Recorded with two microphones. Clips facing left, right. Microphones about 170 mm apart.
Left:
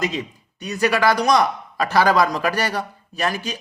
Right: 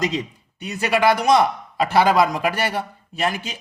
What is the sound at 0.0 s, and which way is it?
A man's voice, 25° right (ahead or behind).